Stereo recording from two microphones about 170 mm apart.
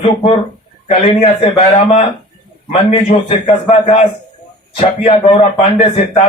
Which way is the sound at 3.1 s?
40° left (ahead or behind).